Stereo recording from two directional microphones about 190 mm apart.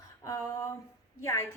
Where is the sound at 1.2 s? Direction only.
15° left (ahead or behind).